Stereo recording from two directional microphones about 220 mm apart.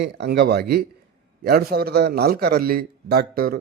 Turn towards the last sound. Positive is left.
turn(degrees=-40)  # may be behind; listen again after turning